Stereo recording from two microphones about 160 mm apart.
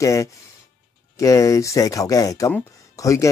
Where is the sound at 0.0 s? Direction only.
20° left (ahead or behind).